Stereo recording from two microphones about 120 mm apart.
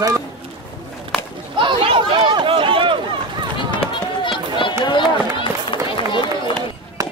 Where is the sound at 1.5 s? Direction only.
45° right (ahead or behind).